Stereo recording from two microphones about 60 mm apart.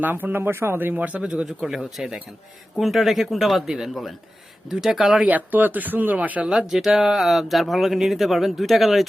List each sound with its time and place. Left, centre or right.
0.0 s speech: right
0.9 s speech: right
1.5 s speech: centre
5.3 s speech: right
6.4 s speech: centre